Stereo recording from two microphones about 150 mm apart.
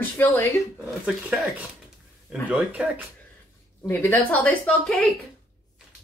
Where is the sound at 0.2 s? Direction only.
20° left (ahead or behind).